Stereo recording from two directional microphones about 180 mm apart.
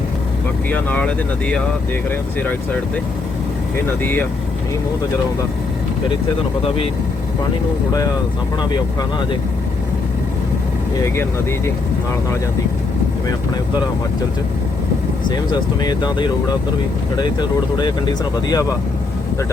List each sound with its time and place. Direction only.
0.7 s speech: 10° left (ahead or behind)
4.0 s speech: 10° left (ahead or behind)
8.7 s speech: 25° left (ahead or behind)
11.0 s speech: 15° left (ahead or behind)
15.5 s speech: 25° left (ahead or behind)
17.7 s speech: 25° left (ahead or behind)